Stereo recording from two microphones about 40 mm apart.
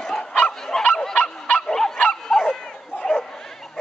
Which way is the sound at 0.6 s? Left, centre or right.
Centre.